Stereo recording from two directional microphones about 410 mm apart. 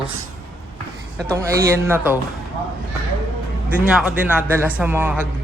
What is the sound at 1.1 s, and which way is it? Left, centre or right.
A woman's voice, centre.